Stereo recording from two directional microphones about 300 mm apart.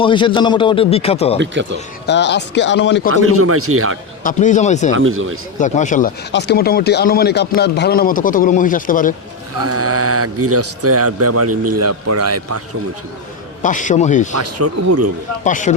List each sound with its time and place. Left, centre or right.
0.0 s a man's voice: centre
2.0 s a man's voice: left
3.1 s a man's voice: right
4.2 s a man's voice: left
4.9 s a man's voice: right
5.5 s a man's voice: left
9.6 s a man's voice: right
13.6 s a man's voice: left
14.3 s a man's voice: right
15.4 s a man's voice: left